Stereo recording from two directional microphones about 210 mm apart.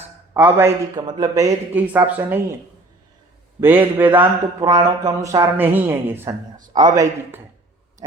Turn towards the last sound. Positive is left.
turn(degrees=-15)  # may be behind; listen again after turning